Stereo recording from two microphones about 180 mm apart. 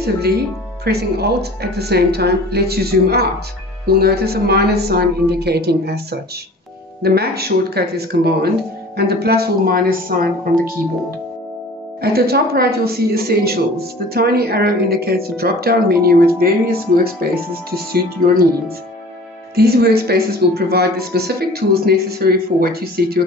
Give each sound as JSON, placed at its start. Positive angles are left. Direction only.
{"t": 0.8, "sound": "speech", "side_deg": -60}
{"t": 12.0, "sound": "speech", "side_deg": -60}
{"t": 19.5, "sound": "speech", "side_deg": -60}